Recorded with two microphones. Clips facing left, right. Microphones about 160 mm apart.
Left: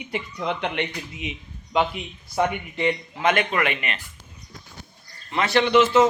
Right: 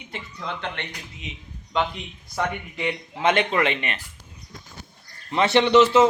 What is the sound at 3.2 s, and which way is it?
Speech, 25° right (ahead or behind).